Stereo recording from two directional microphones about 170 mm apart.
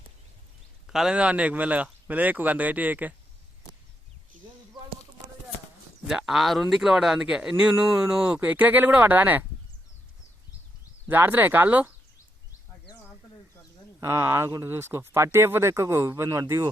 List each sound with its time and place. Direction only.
0.9 s speech: 5° right (ahead or behind)
6.1 s speech: centre (ahead or behind)
11.1 s speech: 10° right (ahead or behind)
14.0 s speech: 15° right (ahead or behind)